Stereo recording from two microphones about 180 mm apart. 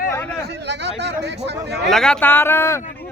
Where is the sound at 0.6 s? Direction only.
70° right (ahead or behind).